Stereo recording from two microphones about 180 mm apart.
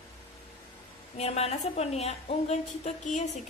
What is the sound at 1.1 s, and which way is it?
A woman's voice, 35° left (ahead or behind).